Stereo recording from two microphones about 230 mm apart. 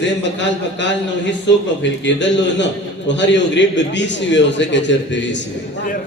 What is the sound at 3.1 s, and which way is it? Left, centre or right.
A man's voice, left.